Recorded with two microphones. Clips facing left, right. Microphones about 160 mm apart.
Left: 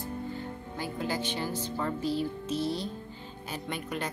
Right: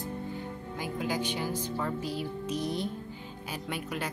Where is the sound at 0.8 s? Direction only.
10° right (ahead or behind).